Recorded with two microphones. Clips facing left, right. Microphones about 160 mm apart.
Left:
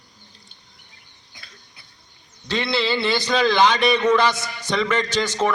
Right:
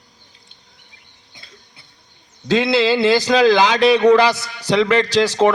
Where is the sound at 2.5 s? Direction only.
90° right.